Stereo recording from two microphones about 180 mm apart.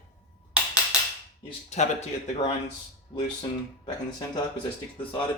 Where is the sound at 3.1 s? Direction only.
25° left (ahead or behind).